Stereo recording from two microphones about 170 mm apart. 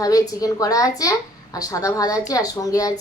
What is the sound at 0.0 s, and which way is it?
A woman's voice, 20° left (ahead or behind).